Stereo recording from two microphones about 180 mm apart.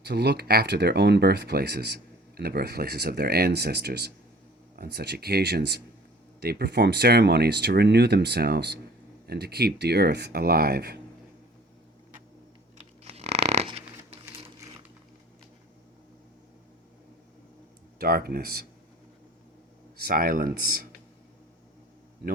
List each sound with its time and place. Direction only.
0.0 s speech: 65° right (ahead or behind)
12.7 s dog: 35° right (ahead or behind)
18.0 s speech: 60° right (ahead or behind)
20.0 s speech: 55° right (ahead or behind)